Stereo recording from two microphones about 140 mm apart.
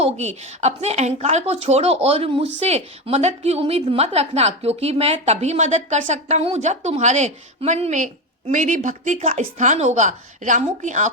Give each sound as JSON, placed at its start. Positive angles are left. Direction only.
{"t": 0.0, "sound": "a woman's voice", "side_deg": -55}
{"t": 9.1, "sound": "a woman's voice", "side_deg": -45}
{"t": 9.6, "sound": "a woman's voice", "side_deg": -60}